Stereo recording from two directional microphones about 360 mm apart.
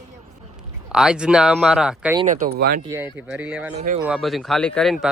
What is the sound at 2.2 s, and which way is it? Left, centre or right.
Speech, right.